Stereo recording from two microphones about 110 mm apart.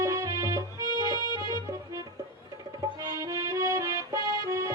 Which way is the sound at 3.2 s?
30° right (ahead or behind).